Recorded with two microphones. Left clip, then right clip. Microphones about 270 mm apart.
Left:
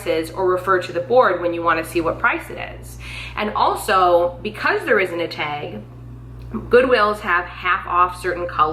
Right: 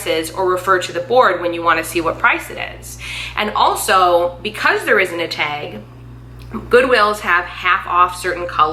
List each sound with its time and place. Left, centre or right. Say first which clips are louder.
0.0 s speech: right 2 dB; centre